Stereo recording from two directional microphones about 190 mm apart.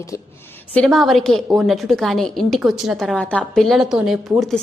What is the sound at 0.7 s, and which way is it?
A woman's voice, 5° left (ahead or behind).